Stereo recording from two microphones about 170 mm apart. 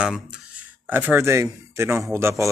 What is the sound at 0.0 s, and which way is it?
Speech, 5° right (ahead or behind).